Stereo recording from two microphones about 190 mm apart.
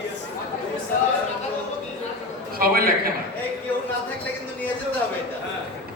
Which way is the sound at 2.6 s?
50° right (ahead or behind).